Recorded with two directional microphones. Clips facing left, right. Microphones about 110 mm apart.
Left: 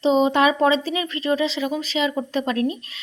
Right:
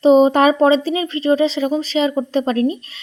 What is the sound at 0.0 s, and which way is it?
A woman's voice, 45° right (ahead or behind).